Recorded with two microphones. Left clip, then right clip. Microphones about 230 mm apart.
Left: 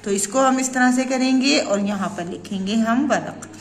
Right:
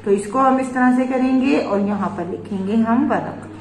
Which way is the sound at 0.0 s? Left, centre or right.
Left.